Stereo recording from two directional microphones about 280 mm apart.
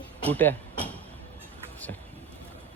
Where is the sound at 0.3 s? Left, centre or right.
Centre.